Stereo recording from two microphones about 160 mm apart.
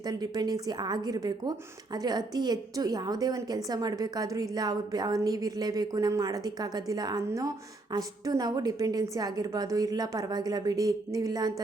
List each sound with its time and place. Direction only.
0.0 s speech: 25° right (ahead or behind)